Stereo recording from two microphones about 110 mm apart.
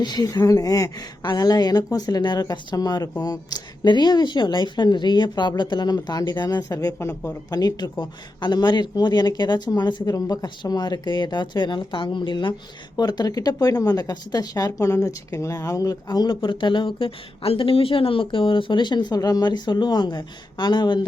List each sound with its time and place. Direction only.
0.0 s speech: 40° left (ahead or behind)
7.5 s speech: 40° left (ahead or behind)
13.0 s speech: 35° left (ahead or behind)